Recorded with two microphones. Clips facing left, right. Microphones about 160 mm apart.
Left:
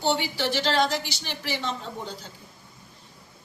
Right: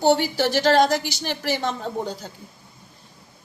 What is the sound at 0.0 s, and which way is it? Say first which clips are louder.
A woman's voice: right 7 dB; 45° right (ahead or behind).